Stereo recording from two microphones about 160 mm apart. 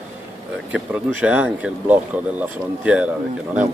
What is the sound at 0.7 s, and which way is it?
Speech, 10° right (ahead or behind).